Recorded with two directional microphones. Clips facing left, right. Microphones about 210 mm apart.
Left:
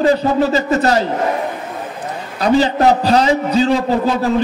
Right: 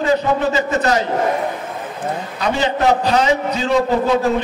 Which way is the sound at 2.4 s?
35° left (ahead or behind).